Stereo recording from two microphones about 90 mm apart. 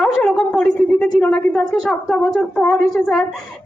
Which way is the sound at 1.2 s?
20° left (ahead or behind).